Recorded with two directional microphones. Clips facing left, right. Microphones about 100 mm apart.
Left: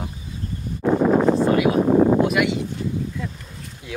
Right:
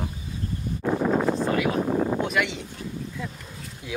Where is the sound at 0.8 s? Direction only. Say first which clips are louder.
Left 6 dB; 40° left (ahead or behind).